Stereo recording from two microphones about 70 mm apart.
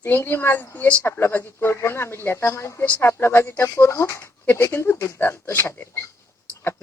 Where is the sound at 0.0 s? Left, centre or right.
Left.